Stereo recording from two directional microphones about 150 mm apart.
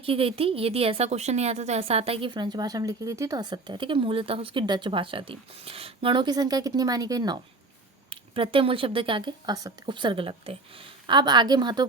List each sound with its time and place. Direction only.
0.0 s a woman's voice: 40° right (ahead or behind)
8.1 s a woman's voice: 35° right (ahead or behind)